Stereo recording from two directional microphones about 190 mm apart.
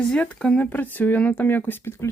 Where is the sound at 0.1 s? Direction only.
5° left (ahead or behind).